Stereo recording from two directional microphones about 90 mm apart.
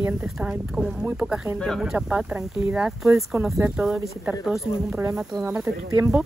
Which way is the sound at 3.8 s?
5° right (ahead or behind).